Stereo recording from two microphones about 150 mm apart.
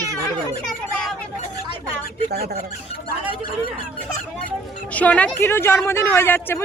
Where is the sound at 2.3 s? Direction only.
90° right.